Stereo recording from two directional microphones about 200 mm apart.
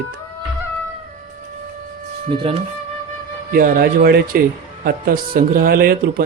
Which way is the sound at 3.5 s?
45° right (ahead or behind).